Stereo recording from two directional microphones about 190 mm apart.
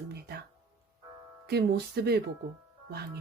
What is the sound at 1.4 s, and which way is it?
Speech, 60° right (ahead or behind).